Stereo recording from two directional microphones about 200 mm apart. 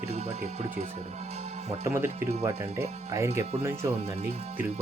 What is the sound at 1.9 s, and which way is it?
Speech, 10° right (ahead or behind).